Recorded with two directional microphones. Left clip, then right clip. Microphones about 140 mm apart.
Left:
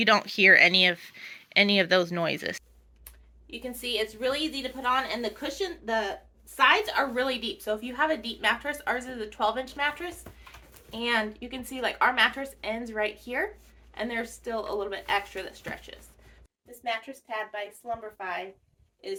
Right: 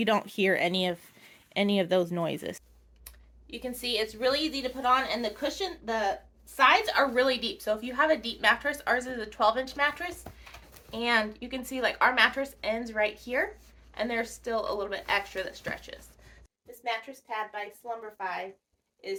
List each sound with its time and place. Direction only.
0.0 s a woman's voice: 25° right (ahead or behind)
16.8 s a woman's voice: 25° left (ahead or behind)